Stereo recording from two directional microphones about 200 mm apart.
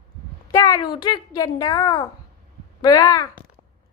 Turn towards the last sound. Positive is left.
turn(degrees=15)  # may be behind; listen again after turning